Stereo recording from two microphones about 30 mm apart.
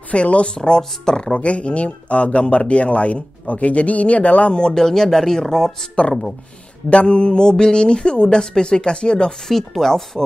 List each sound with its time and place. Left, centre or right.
0.1 s speech: left
0.6 s speech: left
1.4 s speech: left
4.7 s speech: centre
6.0 s speech: left
9.5 s speech: centre